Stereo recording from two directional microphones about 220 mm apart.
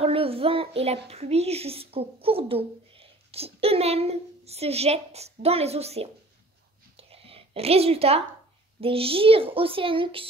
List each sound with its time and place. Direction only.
0.0 s a child's voice: 25° right (ahead or behind)
7.0 s a sound: 25° right (ahead or behind)
8.8 s a child's voice: 25° right (ahead or behind)